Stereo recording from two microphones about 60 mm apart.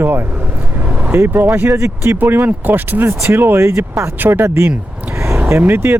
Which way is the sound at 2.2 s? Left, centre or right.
Right.